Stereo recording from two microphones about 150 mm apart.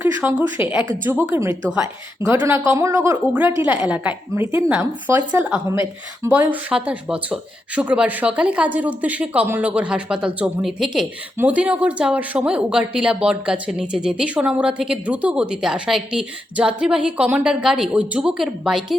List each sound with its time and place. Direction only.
0.0 s speech: 10° right (ahead or behind)